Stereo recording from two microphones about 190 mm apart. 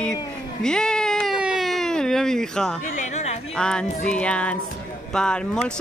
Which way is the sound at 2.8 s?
40° left (ahead or behind).